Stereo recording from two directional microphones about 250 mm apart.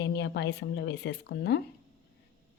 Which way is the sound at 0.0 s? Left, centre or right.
Left.